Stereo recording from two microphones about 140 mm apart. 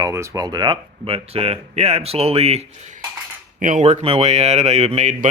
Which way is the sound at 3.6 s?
60° right (ahead or behind).